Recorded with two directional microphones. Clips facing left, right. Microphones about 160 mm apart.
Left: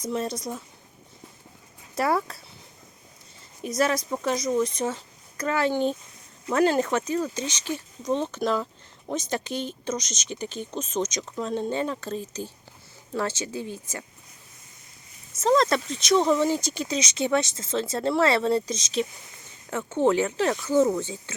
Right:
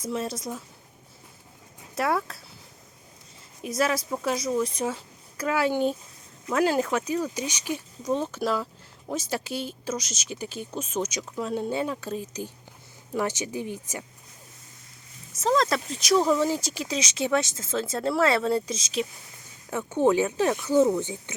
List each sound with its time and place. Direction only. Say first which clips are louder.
0.0 s speech: left 1 dB; 5° right (ahead or behind)
2.0 s speech: left 2 dB; centre (ahead or behind)
3.6 s speech: left 1 dB; 5° right (ahead or behind)
15.4 s speech: left 2 dB; centre (ahead or behind); by 21.3 s 15° right (ahead or behind)